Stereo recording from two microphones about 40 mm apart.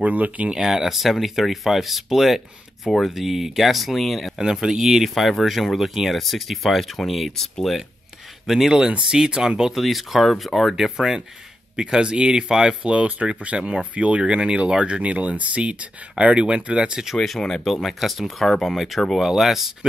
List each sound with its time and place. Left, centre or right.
0.0 s speech: right
0.5 s speech: centre
4.4 s speech: centre
8.5 s speech: centre
9.1 s speech: centre
9.8 s speech: centre
11.0 s speech: centre
17.0 s speech: centre
19.2 s speech: centre